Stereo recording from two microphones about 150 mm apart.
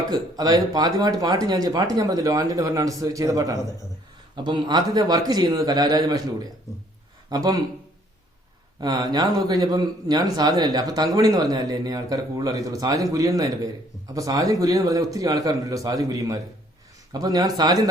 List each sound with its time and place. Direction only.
0.1 s speech: 25° right (ahead or behind)
8.8 s speech: 25° right (ahead or behind)